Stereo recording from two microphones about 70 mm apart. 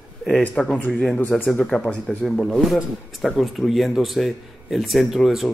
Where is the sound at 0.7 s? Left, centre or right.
Left.